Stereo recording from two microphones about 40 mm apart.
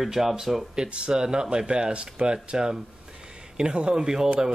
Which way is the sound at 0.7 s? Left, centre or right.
Right.